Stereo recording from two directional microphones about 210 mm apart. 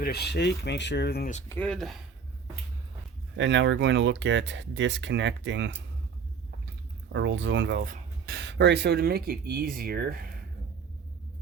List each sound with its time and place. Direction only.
0.0 s speech: 50° left (ahead or behind)
1.5 s speech: 5° left (ahead or behind)
3.3 s speech: 60° right (ahead or behind)
7.1 s speech: 60° right (ahead or behind)
7.9 s speech: 45° right (ahead or behind)